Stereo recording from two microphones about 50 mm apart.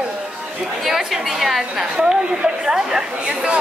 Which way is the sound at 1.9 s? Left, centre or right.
Centre.